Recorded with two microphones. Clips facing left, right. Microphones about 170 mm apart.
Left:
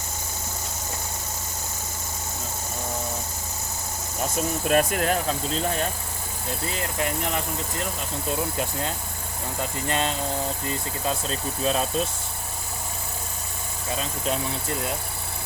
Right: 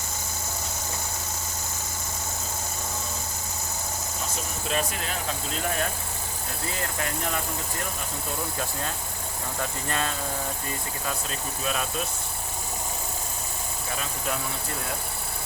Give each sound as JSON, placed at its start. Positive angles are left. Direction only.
{"t": 4.7, "sound": "speech", "side_deg": 55}
{"t": 6.7, "sound": "speech", "side_deg": 20}
{"t": 9.6, "sound": "speech", "side_deg": 20}